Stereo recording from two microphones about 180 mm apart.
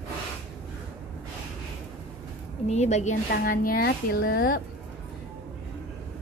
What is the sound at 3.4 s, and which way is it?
Speech, 55° left (ahead or behind).